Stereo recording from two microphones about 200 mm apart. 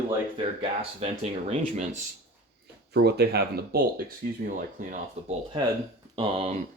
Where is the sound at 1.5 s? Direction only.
35° right (ahead or behind).